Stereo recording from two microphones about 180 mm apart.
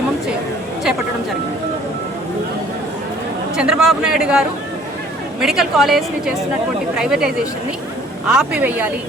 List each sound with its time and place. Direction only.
3.5 s a woman's voice: 5° right (ahead or behind)